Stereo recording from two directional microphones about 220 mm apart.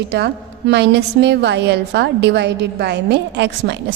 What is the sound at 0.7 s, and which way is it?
A woman's voice, 50° right (ahead or behind).